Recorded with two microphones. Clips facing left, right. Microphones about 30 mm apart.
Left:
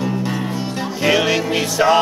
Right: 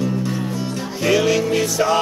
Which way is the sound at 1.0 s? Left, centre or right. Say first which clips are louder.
Even; left.